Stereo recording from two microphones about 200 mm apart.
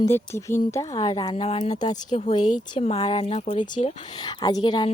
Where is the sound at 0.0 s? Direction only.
15° left (ahead or behind).